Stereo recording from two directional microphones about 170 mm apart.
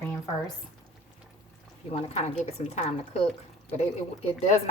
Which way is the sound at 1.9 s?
35° left (ahead or behind).